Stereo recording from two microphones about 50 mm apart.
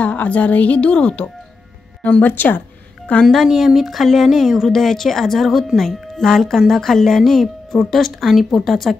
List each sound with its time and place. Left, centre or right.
0.0 s speech: left
2.3 s a woman's voice: left
3.4 s speech: centre